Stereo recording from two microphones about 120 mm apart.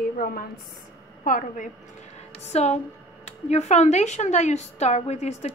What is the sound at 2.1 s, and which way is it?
A woman's voice, 65° left (ahead or behind).